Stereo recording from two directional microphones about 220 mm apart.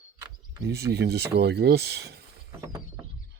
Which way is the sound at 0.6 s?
45° right (ahead or behind).